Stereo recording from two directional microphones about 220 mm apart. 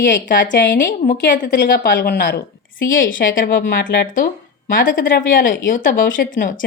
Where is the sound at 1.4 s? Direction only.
50° left (ahead or behind).